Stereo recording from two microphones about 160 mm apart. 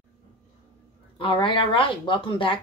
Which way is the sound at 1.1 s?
30° left (ahead or behind).